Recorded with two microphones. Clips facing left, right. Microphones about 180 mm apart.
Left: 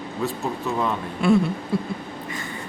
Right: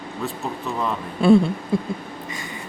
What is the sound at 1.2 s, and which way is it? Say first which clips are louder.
Speech: right 5 dB; 30° right (ahead or behind).